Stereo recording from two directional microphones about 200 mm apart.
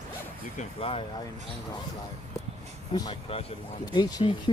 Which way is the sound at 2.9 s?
20° left (ahead or behind).